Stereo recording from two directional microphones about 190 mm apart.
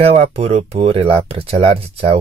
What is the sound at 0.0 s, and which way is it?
Speech, 30° right (ahead or behind).